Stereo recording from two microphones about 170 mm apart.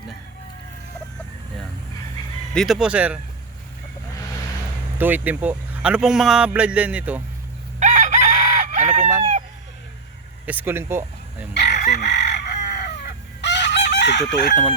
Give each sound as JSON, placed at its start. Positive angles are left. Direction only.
{"t": 2.6, "sound": "speech", "side_deg": 0}
{"t": 4.9, "sound": "speech", "side_deg": -10}
{"t": 7.8, "sound": "chicken", "side_deg": -45}
{"t": 10.4, "sound": "speech", "side_deg": -10}
{"t": 11.5, "sound": "chicken", "side_deg": 75}